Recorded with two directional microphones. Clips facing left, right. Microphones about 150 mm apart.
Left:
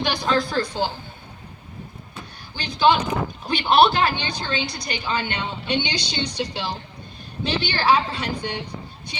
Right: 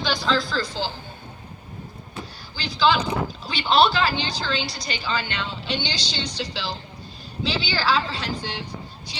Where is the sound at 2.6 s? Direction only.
60° left (ahead or behind).